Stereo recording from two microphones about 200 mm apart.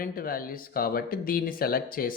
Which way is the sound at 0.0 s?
45° left (ahead or behind).